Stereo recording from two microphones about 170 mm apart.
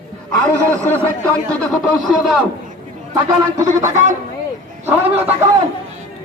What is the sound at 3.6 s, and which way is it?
Speech, 20° right (ahead or behind).